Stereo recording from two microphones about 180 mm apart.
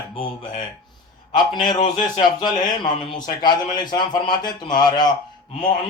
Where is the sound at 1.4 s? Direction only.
25° left (ahead or behind).